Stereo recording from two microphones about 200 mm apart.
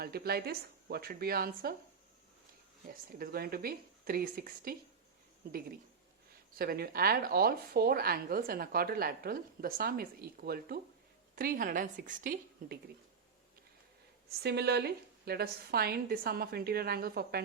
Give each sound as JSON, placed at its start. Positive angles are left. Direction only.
{"t": 0.0, "sound": "speech", "side_deg": -50}
{"t": 2.8, "sound": "speech", "side_deg": -45}
{"t": 14.4, "sound": "speech", "side_deg": -55}